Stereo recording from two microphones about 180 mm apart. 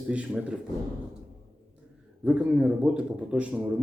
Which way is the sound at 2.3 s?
5° right (ahead or behind).